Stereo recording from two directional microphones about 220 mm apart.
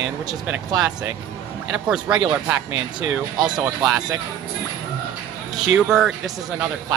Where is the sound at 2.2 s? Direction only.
20° right (ahead or behind).